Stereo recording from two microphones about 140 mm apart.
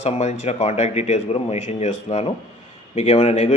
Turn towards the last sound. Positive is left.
turn(degrees=50)  # may be behind; listen again after turning